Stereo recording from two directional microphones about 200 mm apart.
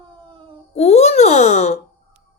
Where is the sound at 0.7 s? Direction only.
30° left (ahead or behind).